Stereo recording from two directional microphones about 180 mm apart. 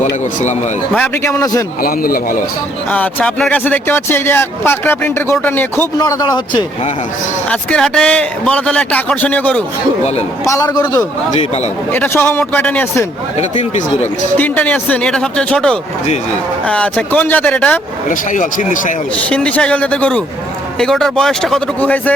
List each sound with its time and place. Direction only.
0.9 s speech: 10° left (ahead or behind)
1.8 s speech: 55° left (ahead or behind)
2.9 s speech: 10° left (ahead or behind)
7.5 s speech: 5° left (ahead or behind)
10.4 s speech: 20° left (ahead or behind)
11.3 s speech: 35° left (ahead or behind)
11.9 s speech: 15° left (ahead or behind)
13.4 s speech: 40° left (ahead or behind)
14.3 s speech: 10° left (ahead or behind)
18.1 s speech: 45° left (ahead or behind)
19.3 s speech: 5° left (ahead or behind)